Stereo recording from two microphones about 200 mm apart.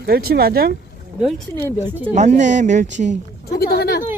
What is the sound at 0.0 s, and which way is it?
Speech, 50° right (ahead or behind).